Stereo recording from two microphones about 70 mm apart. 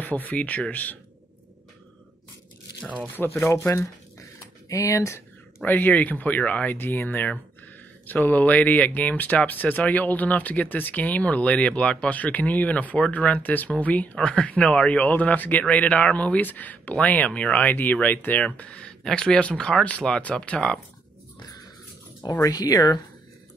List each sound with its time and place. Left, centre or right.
0.0 s speech: left
3.4 s speech: left
5.7 s speech: left
22.4 s speech: left